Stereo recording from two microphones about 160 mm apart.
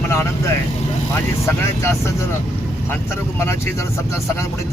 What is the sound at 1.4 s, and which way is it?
Speech, 15° left (ahead or behind).